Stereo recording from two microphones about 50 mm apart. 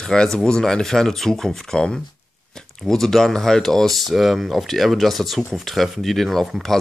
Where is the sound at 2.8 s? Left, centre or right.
Centre.